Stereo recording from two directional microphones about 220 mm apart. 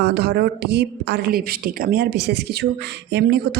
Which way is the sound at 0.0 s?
45° right (ahead or behind).